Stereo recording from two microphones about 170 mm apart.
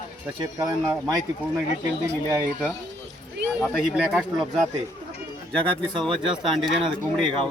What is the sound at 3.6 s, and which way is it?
Speech, 5° right (ahead or behind).